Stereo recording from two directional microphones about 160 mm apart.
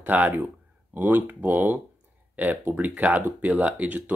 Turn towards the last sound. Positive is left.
turn(degrees=-10)  # may be behind; listen again after turning